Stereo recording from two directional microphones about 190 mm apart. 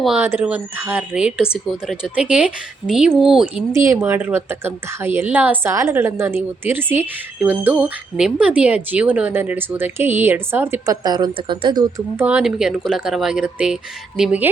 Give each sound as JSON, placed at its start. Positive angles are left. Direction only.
{"t": 0.0, "sound": "a woman's voice", "side_deg": -5}
{"t": 3.7, "sound": "a woman's voice", "side_deg": -15}